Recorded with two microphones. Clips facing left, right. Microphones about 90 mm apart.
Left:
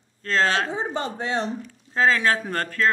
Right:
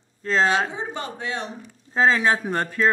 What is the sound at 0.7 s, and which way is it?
Speech, 35° left (ahead or behind).